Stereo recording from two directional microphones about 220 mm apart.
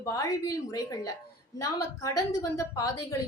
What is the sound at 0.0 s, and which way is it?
A woman's voice, 15° left (ahead or behind).